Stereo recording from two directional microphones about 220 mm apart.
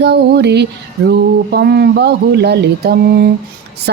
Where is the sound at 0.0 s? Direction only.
50° right (ahead or behind).